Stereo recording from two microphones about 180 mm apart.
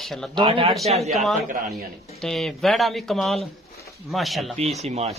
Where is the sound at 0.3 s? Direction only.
25° right (ahead or behind).